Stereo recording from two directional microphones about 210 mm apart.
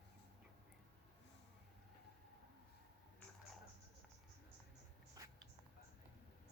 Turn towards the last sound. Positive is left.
turn(degrees=-15)  # may be behind; listen again after turning